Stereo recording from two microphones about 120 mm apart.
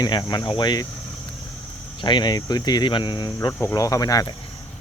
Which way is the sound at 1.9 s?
40° left (ahead or behind).